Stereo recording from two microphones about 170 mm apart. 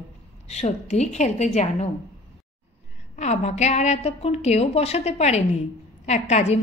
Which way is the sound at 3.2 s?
40° left (ahead or behind).